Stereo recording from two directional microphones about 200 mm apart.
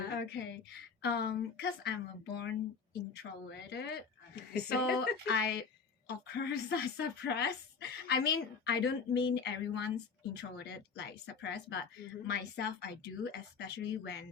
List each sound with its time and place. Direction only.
0.1 s a sound: 60° left (ahead or behind)
1.0 s speech: 55° left (ahead or behind)
3.7 s speech: 55° left (ahead or behind)